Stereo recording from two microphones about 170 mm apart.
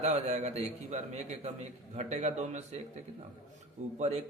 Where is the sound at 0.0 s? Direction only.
40° right (ahead or behind).